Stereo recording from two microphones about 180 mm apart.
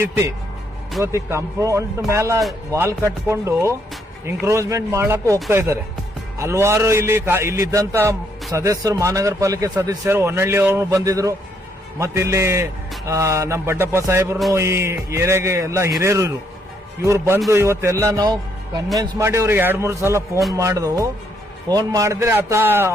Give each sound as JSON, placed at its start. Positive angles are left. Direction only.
{"t": 0.0, "sound": "a man's voice", "side_deg": -15}